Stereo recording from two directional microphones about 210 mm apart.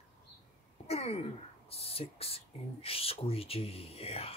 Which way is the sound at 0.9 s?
30° left (ahead or behind).